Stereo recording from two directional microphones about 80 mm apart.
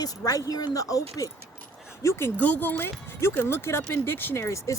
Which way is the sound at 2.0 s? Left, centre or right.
Left.